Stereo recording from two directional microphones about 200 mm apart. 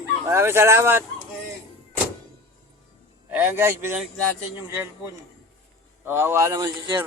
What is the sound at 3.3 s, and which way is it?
Speech, 10° right (ahead or behind).